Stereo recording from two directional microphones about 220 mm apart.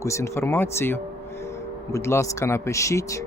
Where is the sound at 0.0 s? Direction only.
15° left (ahead or behind).